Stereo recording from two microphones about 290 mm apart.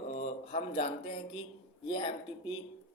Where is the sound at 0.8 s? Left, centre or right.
Left.